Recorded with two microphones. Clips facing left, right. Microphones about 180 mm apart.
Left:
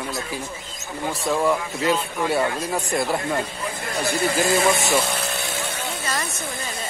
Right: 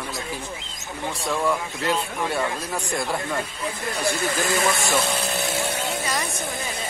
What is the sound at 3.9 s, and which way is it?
Speech, 30° left (ahead or behind).